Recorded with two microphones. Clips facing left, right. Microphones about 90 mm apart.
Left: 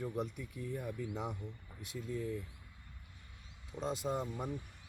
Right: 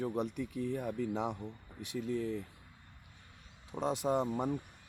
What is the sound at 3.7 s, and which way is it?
Speech, 65° right (ahead or behind).